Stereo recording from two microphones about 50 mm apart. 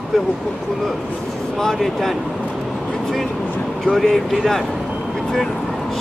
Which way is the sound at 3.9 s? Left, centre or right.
Centre.